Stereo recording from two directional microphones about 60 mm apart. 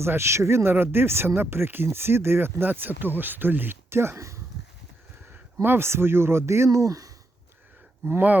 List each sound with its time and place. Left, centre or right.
0.0 s speech: right
5.6 s speech: right
6.7 s speech: right
8.0 s speech: right